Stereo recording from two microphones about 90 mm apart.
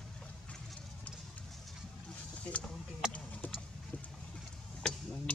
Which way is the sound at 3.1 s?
15° left (ahead or behind).